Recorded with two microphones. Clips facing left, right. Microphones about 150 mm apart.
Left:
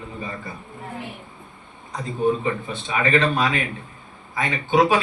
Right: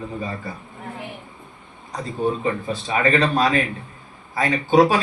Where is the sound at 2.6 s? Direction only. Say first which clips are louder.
Right 3 dB; 35° right (ahead or behind).